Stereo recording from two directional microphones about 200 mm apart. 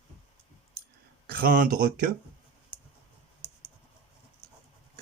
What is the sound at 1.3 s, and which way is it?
Speech, 45° right (ahead or behind).